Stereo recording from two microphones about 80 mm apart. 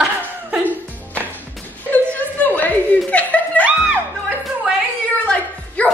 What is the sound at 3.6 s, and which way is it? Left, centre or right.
Music, centre.